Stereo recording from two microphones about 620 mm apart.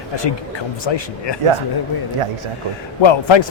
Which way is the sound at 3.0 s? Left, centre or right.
Left.